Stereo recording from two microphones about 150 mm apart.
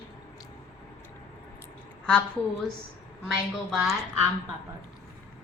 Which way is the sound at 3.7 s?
Centre (ahead or behind).